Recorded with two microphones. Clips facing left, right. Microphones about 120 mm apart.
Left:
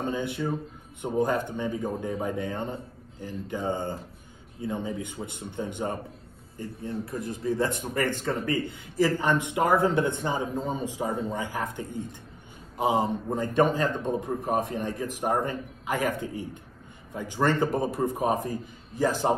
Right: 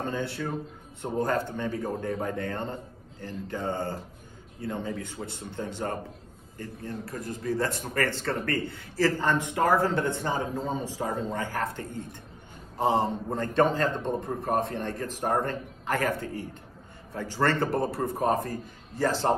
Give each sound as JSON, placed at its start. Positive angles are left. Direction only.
{"t": 0.0, "sound": "speech", "side_deg": 15}